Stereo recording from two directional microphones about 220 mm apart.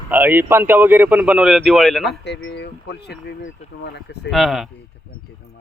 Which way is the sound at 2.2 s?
50° left (ahead or behind).